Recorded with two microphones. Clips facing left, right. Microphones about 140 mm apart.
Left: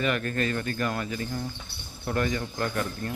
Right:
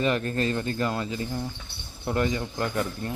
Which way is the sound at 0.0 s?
30° right (ahead or behind).